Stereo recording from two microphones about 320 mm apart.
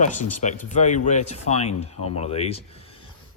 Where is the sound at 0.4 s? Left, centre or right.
Left.